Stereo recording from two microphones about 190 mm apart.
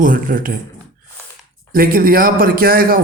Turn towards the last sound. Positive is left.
turn(degrees=-50)  # may be behind; listen again after turning